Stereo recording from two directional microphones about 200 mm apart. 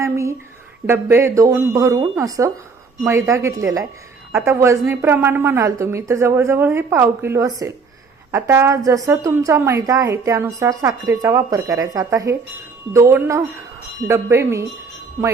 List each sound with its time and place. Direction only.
0.0 s a woman's voice: 15° right (ahead or behind)